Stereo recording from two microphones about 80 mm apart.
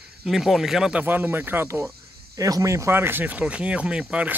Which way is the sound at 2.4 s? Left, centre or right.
Right.